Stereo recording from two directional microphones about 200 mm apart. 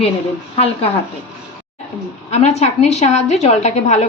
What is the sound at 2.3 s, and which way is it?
A woman's voice, 35° left (ahead or behind).